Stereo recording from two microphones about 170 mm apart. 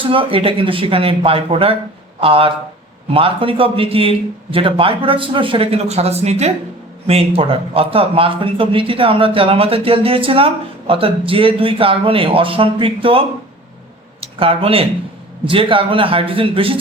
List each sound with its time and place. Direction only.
0.0 s speech: 30° right (ahead or behind)